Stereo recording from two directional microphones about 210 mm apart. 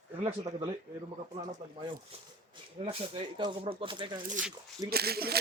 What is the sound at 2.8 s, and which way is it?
Speech, 30° right (ahead or behind).